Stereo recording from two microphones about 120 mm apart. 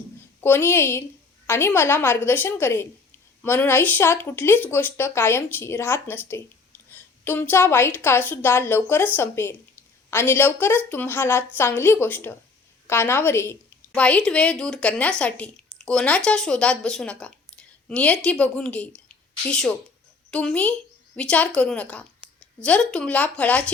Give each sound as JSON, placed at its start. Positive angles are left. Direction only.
{"t": 0.4, "sound": "speech", "side_deg": 20}
{"t": 13.9, "sound": "a woman's voice", "side_deg": 10}